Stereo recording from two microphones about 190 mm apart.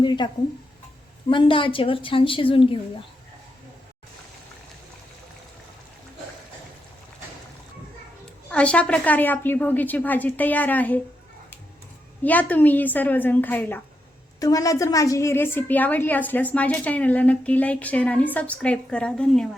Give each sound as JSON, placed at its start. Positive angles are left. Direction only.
{"t": 0.0, "sound": "a sound", "side_deg": 25}
{"t": 1.3, "sound": "a woman's voice", "side_deg": 25}
{"t": 8.4, "sound": "a woman's voice", "side_deg": 5}
{"t": 12.2, "sound": "a woman's voice", "side_deg": 10}